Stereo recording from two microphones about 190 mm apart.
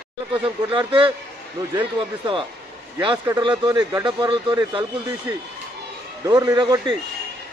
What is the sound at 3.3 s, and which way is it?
Speech, 20° right (ahead or behind).